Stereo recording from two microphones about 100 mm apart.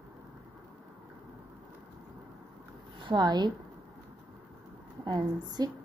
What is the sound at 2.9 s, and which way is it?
Speech, 50° right (ahead or behind).